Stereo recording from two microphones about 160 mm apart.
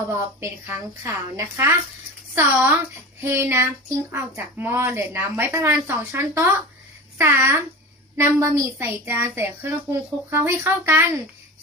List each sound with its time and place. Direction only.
0.3 s speech: 15° right (ahead or behind)